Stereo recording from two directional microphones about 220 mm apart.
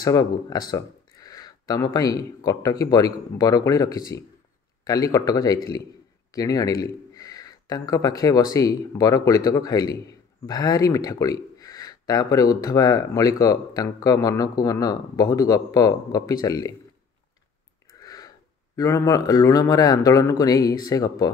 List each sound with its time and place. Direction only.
0.0 s speech: 15° left (ahead or behind)
18.0 s a sound: 15° left (ahead or behind)
18.8 s speech: 15° left (ahead or behind)